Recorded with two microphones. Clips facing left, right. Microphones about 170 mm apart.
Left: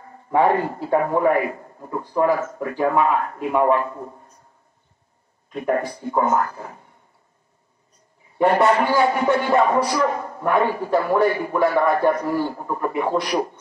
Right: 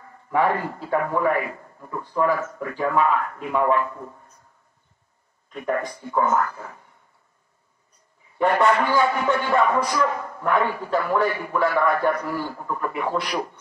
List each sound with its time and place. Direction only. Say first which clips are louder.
0.3 s a man's voice: left 4 dB; 20° left (ahead or behind)
1.5 s a man's voice: left 4 dB; 30° left (ahead or behind)
5.5 s a man's voice: left 4 dB; 20° left (ahead or behind)
8.4 s a man's voice: left 3 dB; 15° left (ahead or behind)